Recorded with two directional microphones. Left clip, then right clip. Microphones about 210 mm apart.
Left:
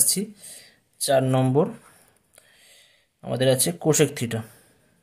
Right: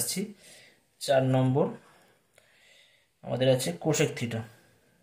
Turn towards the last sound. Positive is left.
turn(degrees=45)  # may be behind; listen again after turning